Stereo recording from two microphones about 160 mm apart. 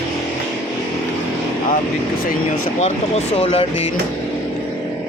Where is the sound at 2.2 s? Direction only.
55° left (ahead or behind).